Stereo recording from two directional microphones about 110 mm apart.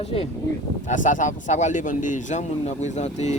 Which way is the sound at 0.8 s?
90° left.